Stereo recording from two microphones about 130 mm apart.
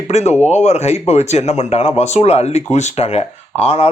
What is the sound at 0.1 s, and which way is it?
Speech, 60° left (ahead or behind).